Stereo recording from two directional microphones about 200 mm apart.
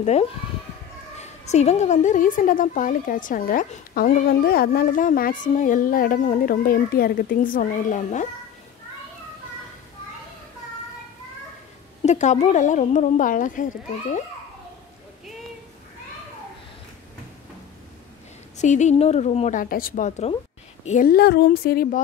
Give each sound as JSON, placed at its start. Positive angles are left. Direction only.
{"t": 0.0, "sound": "a woman's voice", "side_deg": 35}
{"t": 12.0, "sound": "a woman's voice", "side_deg": 35}
{"t": 18.6, "sound": "a woman's voice", "side_deg": 35}